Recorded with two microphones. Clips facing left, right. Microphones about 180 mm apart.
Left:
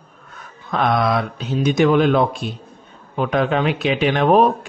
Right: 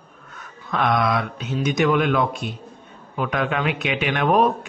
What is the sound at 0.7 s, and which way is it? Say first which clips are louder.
A man's voice: left 2 dB; 35° left (ahead or behind).